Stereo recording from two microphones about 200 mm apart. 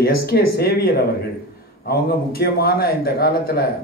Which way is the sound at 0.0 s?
50° left (ahead or behind).